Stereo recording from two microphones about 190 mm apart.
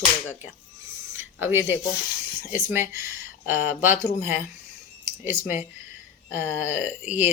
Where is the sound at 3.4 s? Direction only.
45° left (ahead or behind).